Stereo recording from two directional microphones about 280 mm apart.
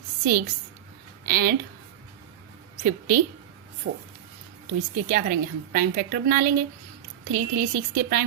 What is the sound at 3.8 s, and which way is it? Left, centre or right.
Speech, right.